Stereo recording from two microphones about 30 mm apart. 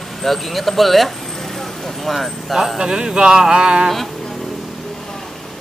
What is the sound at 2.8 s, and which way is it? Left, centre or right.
Speech, right.